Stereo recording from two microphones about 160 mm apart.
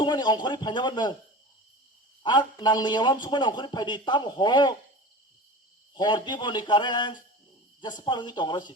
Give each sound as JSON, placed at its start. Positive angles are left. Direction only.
{"t": 0.0, "sound": "a man's voice", "side_deg": 25}
{"t": 2.2, "sound": "a man's voice", "side_deg": 30}
{"t": 5.9, "sound": "a man's voice", "side_deg": 30}